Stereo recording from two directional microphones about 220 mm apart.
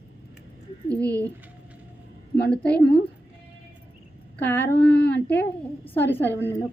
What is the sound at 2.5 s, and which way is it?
Speech, 5° left (ahead or behind).